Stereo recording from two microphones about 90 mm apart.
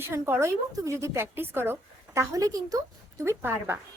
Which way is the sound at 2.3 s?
40° right (ahead or behind).